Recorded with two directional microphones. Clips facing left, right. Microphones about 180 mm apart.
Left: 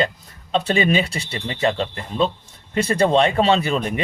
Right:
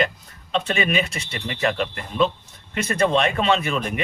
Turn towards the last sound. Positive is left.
turn(degrees=35)  # may be behind; listen again after turning